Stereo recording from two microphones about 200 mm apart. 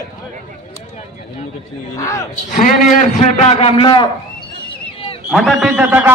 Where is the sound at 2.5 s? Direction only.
40° left (ahead or behind).